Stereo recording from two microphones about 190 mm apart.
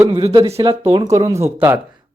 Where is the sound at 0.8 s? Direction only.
15° right (ahead or behind).